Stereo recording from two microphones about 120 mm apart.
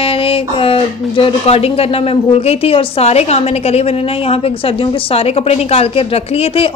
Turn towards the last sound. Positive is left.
turn(degrees=55)  # may be behind; listen again after turning